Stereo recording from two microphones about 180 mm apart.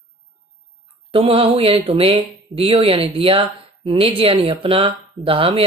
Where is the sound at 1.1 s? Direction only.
30° right (ahead or behind).